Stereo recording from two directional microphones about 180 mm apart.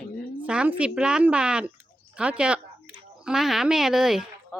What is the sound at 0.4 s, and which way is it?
A woman's voice, 5° right (ahead or behind).